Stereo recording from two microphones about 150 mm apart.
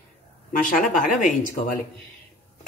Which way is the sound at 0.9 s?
60° left (ahead or behind).